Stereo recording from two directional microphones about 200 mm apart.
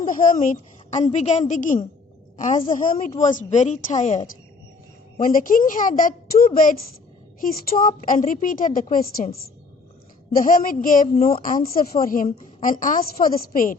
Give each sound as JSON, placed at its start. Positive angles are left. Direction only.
{"t": 0.0, "sound": "a woman's voice", "side_deg": 40}